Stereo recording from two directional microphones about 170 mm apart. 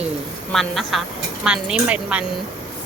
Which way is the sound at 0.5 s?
Centre (ahead or behind).